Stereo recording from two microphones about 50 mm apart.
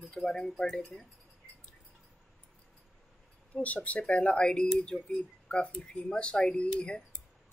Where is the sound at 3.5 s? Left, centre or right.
Left.